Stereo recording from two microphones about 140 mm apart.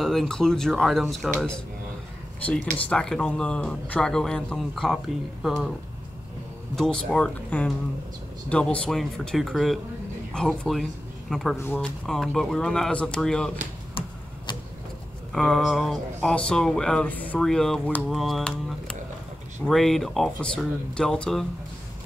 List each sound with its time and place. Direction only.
0.0 s speech: centre (ahead or behind)
6.7 s speech: 5° left (ahead or behind)
11.5 s speech: 15° left (ahead or behind)
12.1 s speech: 5° left (ahead or behind)
13.9 s a sound: 35° left (ahead or behind)
15.3 s speech: centre (ahead or behind)